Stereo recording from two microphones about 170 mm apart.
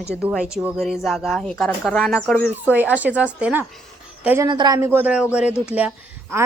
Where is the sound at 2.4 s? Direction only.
10° right (ahead or behind).